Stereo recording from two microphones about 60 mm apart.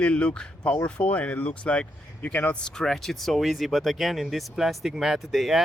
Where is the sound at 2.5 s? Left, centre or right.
Centre.